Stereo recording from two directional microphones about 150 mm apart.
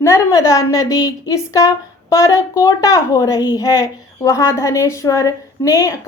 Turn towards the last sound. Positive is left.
turn(degrees=20)  # may be behind; listen again after turning